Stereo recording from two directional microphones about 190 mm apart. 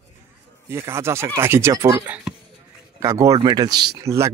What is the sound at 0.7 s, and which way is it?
Speech, 15° right (ahead or behind).